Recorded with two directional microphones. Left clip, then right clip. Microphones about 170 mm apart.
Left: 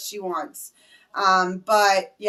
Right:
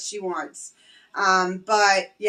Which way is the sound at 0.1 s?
15° left (ahead or behind).